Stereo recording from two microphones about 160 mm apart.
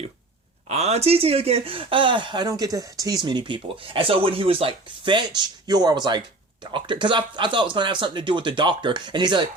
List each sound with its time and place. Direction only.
0.7 s speech: 45° right (ahead or behind); by 9.5 s 25° right (ahead or behind)